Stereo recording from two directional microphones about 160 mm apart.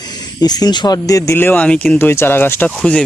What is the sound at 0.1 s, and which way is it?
Speech, 25° left (ahead or behind).